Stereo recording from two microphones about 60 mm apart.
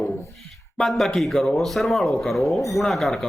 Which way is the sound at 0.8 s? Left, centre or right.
Centre.